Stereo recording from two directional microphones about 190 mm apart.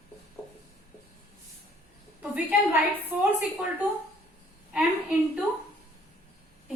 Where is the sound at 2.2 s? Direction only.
5° right (ahead or behind).